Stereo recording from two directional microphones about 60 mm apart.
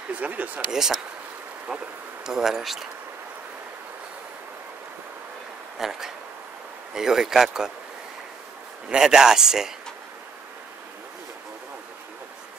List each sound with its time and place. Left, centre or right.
0.1 s speech: right
0.7 s speech: centre
5.8 s speech: centre
8.8 s speech: centre